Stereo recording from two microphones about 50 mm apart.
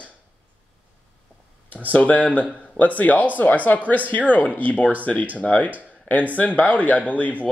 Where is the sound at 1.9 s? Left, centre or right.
Left.